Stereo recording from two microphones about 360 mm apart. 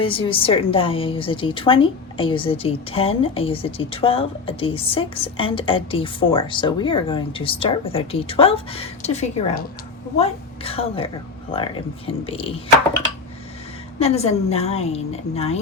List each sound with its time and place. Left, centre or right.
0.0 s a woman's voice: centre
14.0 s a woman's voice: centre